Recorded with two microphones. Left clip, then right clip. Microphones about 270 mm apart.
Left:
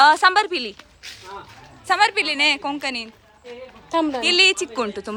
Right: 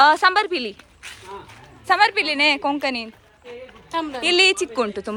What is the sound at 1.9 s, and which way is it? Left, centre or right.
A woman's voice, centre.